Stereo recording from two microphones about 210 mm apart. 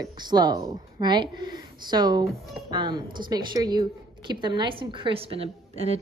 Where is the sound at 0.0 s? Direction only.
20° right (ahead or behind).